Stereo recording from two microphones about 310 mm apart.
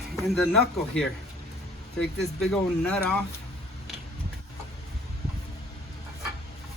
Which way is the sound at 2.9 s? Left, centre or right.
Centre.